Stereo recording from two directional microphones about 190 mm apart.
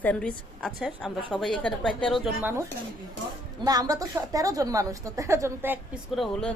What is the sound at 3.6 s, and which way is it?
A woman's voice, 20° right (ahead or behind).